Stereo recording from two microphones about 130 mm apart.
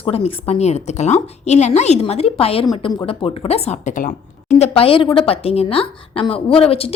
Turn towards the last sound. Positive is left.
turn(degrees=45)  # may be behind; listen again after turning